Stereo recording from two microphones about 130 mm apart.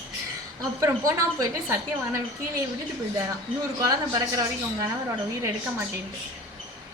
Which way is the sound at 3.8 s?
30° right (ahead or behind).